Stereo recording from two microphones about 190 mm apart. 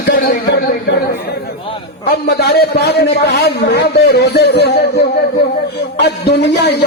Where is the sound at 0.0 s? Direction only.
55° left (ahead or behind).